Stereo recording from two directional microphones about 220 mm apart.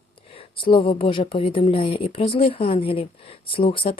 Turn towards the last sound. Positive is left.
turn(degrees=25)  # may be behind; listen again after turning